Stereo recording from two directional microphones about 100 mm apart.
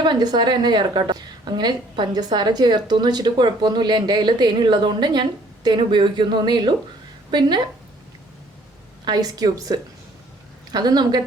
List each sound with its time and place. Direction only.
0.0 s a woman's voice: 45° right (ahead or behind)
9.0 s a woman's voice: 45° right (ahead or behind)